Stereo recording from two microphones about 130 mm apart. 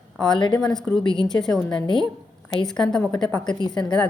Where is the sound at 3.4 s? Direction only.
35° left (ahead or behind).